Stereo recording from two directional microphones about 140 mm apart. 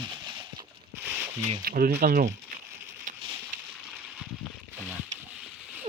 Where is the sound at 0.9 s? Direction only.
15° right (ahead or behind).